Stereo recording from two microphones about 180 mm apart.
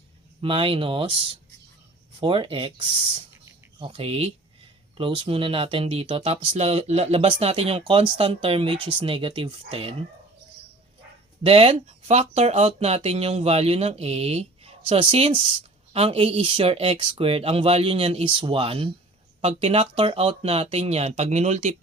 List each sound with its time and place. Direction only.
0.4 s speech: 30° right (ahead or behind)
11.4 s speech: 35° right (ahead or behind)